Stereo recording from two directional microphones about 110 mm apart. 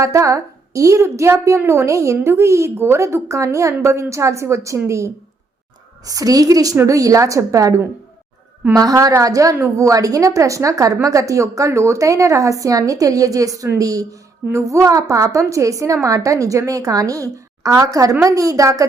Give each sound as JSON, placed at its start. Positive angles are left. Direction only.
{"t": 0.0, "sound": "a woman's voice", "side_deg": -30}
{"t": 8.8, "sound": "a woman's voice", "side_deg": -35}